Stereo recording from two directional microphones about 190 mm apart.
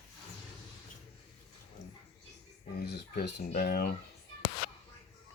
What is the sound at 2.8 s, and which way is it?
Speech, 60° left (ahead or behind).